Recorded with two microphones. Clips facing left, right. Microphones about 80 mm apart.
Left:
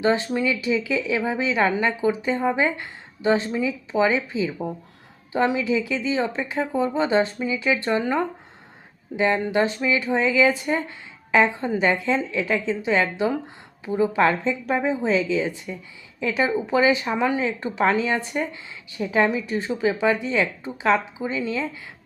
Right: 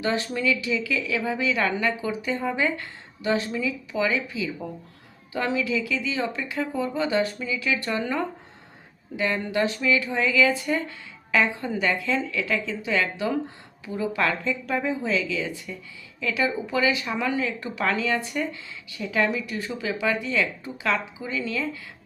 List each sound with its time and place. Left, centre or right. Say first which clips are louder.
0.0 s speech: left 4 dB; left